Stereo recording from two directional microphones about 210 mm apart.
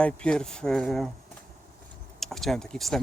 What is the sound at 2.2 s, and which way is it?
Speech, centre (ahead or behind).